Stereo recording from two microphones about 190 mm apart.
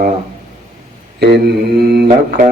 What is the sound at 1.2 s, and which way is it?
Mantra, 60° right (ahead or behind).